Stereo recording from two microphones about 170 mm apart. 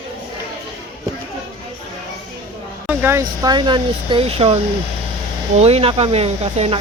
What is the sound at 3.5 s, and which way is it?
Speech, 25° right (ahead or behind).